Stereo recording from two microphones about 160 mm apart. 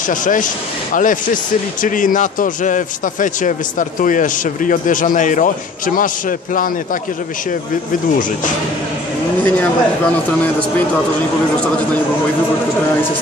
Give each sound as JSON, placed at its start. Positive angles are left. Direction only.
{"t": 0.1, "sound": "speech", "side_deg": 55}
{"t": 9.4, "sound": "speech", "side_deg": 10}